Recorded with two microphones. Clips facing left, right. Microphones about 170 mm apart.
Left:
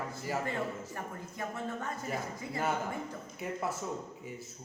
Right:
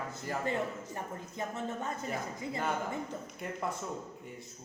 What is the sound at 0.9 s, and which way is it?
Speech, 20° right (ahead or behind).